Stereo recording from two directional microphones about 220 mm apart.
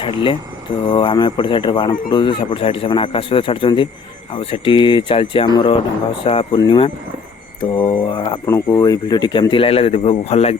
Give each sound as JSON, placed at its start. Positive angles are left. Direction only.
{"t": 0.0, "sound": "speech", "side_deg": 25}